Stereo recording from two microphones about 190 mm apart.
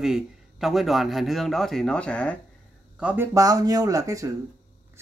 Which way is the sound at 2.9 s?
10° right (ahead or behind).